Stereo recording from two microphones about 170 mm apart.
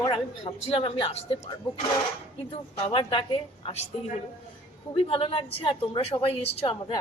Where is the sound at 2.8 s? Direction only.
30° left (ahead or behind).